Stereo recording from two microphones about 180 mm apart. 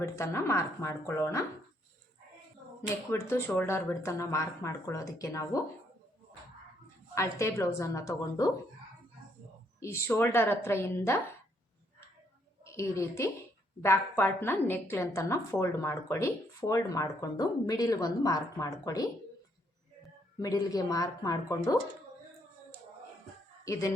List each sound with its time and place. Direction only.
0.0 s a woman's voice: 15° left (ahead or behind)
3.1 s a woman's voice: 15° left (ahead or behind)
7.1 s a woman's voice: 15° left (ahead or behind)
9.8 s a woman's voice: 15° left (ahead or behind)
12.6 s a woman's voice: 15° left (ahead or behind)
20.4 s a woman's voice: 20° left (ahead or behind)